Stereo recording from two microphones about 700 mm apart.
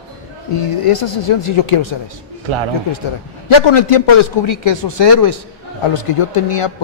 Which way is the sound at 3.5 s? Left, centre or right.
Left.